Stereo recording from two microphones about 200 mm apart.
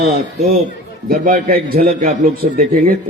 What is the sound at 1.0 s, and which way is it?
A man's voice, 45° right (ahead or behind).